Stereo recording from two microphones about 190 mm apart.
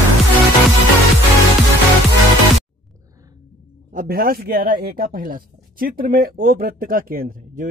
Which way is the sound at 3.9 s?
50° right (ahead or behind).